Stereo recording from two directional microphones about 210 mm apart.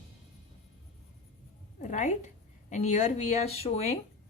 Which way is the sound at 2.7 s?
35° left (ahead or behind).